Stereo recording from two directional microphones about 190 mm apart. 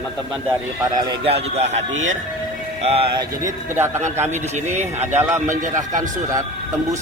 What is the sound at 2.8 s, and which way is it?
Speech, 30° right (ahead or behind).